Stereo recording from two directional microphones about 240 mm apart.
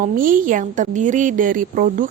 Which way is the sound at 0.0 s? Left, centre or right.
Right.